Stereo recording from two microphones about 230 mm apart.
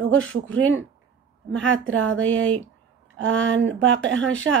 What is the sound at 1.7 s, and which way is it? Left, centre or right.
Speech, right.